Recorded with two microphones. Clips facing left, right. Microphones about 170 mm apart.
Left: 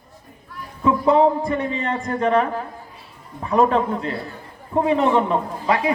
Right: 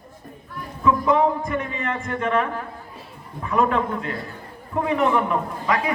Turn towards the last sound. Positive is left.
turn(degrees=30)  # may be behind; listen again after turning